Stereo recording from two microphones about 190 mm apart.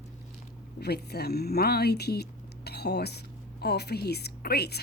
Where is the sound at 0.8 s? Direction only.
60° left (ahead or behind).